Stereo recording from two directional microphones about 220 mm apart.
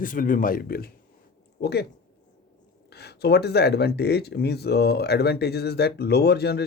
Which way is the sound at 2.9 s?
45° left (ahead or behind).